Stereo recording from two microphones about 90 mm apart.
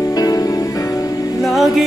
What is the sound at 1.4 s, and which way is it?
Music, centre (ahead or behind).